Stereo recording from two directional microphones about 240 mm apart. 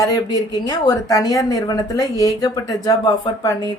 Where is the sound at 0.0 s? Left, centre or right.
Centre.